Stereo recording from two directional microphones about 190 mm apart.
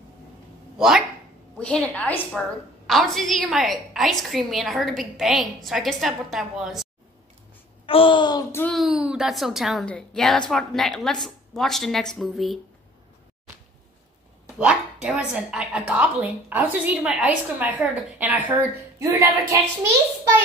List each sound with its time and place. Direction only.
0.7 s a woman's voice: centre (ahead or behind)
7.8 s a child's voice: 25° left (ahead or behind)
8.7 s a woman's voice: centre (ahead or behind)
14.6 s a woman's voice: 5° right (ahead or behind)